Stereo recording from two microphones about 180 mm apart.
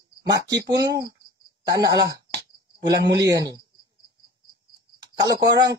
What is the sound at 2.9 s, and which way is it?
Speech, 70° right (ahead or behind).